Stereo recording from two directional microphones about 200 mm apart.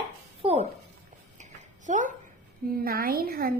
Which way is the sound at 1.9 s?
40° right (ahead or behind).